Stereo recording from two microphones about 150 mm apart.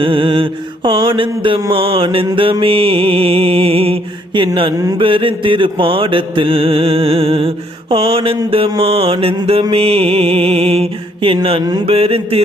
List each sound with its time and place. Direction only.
0.0 s mantra: 35° right (ahead or behind)